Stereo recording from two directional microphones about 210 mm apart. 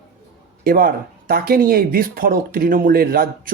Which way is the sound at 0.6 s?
45° right (ahead or behind).